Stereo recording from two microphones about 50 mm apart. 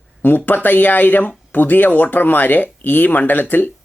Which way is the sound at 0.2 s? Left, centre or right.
Left.